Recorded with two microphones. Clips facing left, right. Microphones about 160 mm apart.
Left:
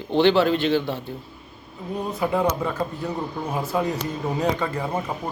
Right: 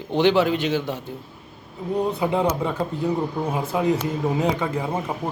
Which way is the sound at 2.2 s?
20° right (ahead or behind).